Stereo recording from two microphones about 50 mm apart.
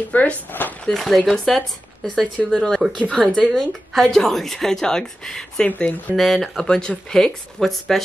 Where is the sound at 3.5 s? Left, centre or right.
Centre.